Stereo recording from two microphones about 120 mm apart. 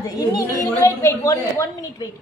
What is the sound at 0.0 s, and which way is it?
A woman's voice, 30° left (ahead or behind).